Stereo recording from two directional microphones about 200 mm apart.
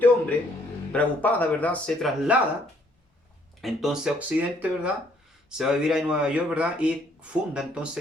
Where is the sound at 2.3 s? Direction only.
5° right (ahead or behind).